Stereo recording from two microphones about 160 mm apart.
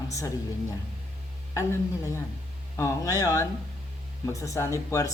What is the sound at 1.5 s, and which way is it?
Speech, 20° left (ahead or behind).